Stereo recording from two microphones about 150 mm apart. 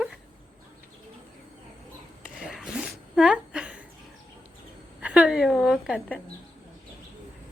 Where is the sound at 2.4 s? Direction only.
Centre (ahead or behind).